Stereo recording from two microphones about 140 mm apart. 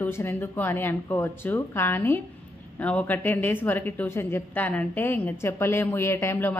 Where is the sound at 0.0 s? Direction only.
15° left (ahead or behind).